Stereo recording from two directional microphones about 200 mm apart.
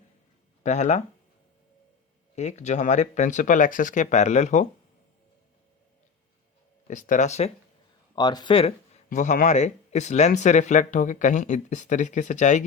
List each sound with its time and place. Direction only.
0.6 s speech: 35° left (ahead or behind)
2.3 s speech: 35° left (ahead or behind)
6.8 s speech: 40° left (ahead or behind)
8.1 s speech: 20° left (ahead or behind)
9.0 s speech: 40° left (ahead or behind)